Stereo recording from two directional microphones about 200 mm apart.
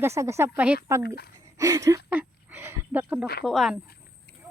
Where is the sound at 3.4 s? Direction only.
Centre (ahead or behind).